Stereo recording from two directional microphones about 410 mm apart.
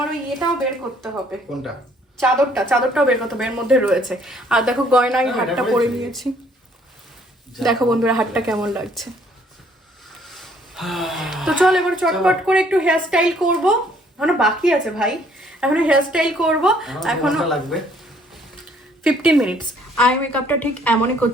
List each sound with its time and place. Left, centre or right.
0.0 s speech: centre
2.1 s speech: centre
7.5 s speech: centre
10.2 s a woman's voice: centre
19.0 s speech: centre